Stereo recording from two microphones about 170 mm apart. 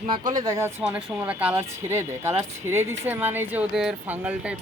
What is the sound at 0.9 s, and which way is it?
Speech, 5° right (ahead or behind).